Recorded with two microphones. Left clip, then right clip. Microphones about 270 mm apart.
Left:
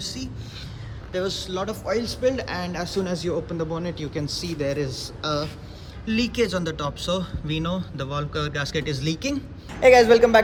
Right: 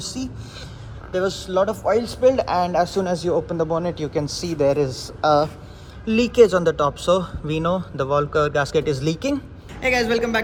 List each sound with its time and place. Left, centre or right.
0.0 s speech: centre